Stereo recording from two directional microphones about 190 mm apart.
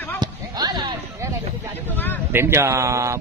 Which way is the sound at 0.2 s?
20° right (ahead or behind).